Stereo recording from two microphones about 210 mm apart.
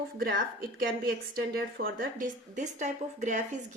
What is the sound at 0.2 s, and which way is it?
A woman's voice, 45° right (ahead or behind).